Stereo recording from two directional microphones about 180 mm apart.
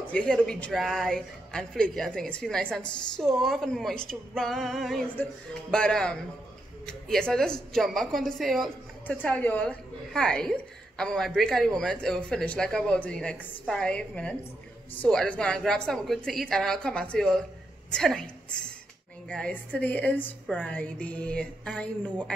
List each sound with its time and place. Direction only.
0.0 s a woman's voice: 5° left (ahead or behind)